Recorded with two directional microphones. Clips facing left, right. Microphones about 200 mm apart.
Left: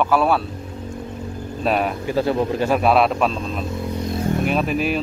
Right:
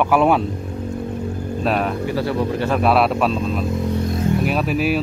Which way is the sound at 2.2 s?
20° left (ahead or behind).